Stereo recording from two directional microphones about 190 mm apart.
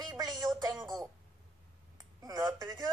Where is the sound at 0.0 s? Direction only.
20° right (ahead or behind).